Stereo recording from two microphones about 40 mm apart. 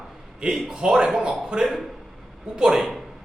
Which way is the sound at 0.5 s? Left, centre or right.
Centre.